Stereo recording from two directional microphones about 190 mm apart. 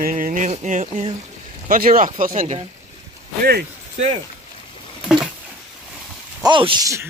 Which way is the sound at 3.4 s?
55° right (ahead or behind).